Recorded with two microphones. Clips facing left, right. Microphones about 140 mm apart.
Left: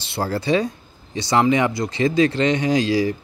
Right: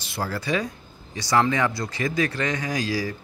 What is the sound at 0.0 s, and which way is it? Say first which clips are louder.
Speech: left 5 dB; 30° left (ahead or behind).